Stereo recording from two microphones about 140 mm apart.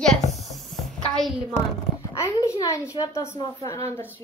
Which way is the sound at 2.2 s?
20° left (ahead or behind).